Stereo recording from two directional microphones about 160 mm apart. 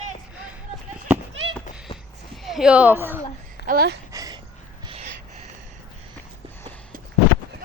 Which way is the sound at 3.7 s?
75° right (ahead or behind).